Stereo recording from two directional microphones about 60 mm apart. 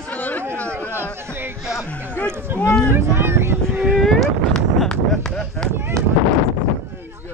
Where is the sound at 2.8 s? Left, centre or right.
Right.